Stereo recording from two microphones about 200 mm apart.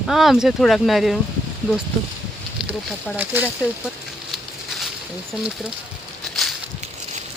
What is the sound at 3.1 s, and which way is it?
Speech, 10° right (ahead or behind).